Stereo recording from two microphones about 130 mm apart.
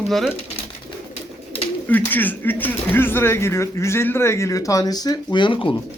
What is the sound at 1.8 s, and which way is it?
Speech, 15° left (ahead or behind).